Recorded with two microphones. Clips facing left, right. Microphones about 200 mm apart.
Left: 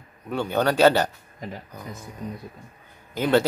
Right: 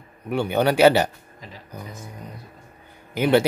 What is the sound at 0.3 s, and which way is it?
Speech, 15° right (ahead or behind).